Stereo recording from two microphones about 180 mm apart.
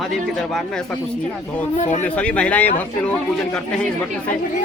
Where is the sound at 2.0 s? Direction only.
10° left (ahead or behind).